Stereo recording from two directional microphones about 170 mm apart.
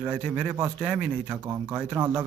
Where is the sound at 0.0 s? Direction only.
5° right (ahead or behind).